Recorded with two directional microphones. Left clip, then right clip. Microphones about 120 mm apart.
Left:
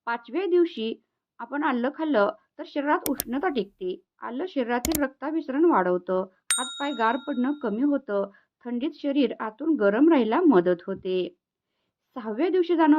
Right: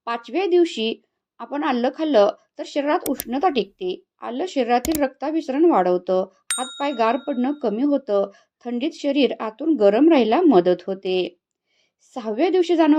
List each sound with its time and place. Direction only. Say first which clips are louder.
0.0 s speech: right 5 dB; 25° right (ahead or behind)